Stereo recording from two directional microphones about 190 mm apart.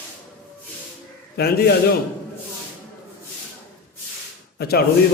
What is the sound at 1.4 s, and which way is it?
Speech, 55° left (ahead or behind).